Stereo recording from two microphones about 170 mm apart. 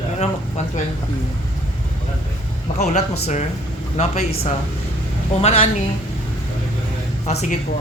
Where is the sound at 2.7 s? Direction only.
45° left (ahead or behind).